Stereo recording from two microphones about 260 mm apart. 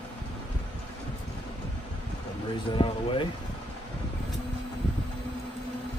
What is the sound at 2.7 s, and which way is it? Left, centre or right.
Speech, centre.